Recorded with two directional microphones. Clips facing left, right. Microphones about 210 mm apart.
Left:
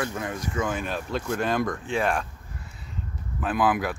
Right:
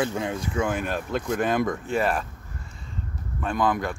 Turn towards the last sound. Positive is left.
turn(degrees=5)  # may be behind; listen again after turning